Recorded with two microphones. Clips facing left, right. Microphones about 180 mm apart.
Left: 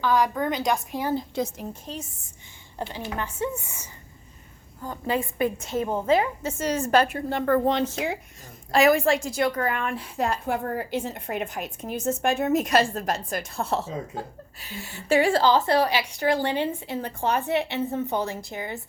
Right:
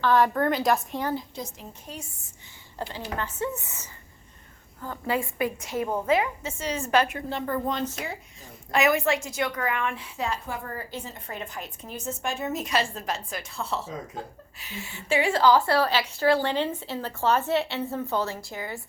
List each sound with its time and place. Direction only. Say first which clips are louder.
0.0 s a woman's voice: right 1 dB; centre (ahead or behind)
2.7 s a woman's voice: left 1 dB; 20° left (ahead or behind)
6.6 s a woman's voice: left 3 dB; 40° left (ahead or behind)
7.3 s a woman's voice: left 6 dB; 60° left (ahead or behind)
7.7 s speech: left 5 dB; 85° left
8.7 s a woman's voice: left 4 dB; 30° left (ahead or behind); by 11.4 s 65° left (ahead or behind)
11.5 s a woman's voice: left 6 dB; 50° left (ahead or behind)
14.6 s a woman's voice: left 1 dB; 35° left (ahead or behind)